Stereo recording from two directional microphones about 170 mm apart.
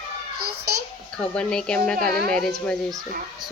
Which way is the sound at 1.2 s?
5° left (ahead or behind).